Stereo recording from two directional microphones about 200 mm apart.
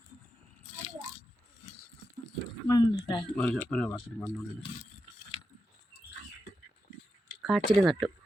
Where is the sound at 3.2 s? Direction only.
Centre (ahead or behind).